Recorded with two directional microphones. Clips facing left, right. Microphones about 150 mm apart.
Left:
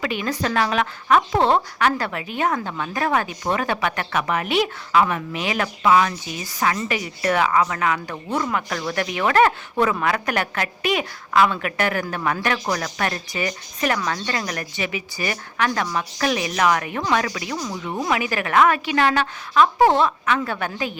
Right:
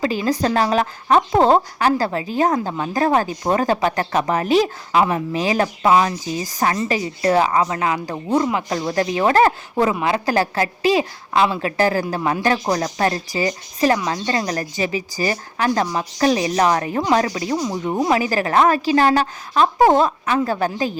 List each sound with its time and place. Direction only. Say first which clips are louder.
0.0 s a woman's voice: right 5 dB; 35° right (ahead or behind)